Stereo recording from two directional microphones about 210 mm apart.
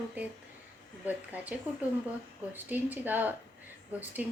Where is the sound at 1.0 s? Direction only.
10° right (ahead or behind).